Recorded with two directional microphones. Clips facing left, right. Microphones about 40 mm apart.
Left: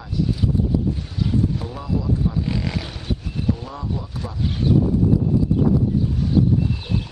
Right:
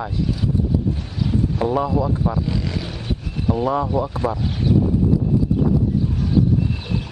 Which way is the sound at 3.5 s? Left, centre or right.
Right.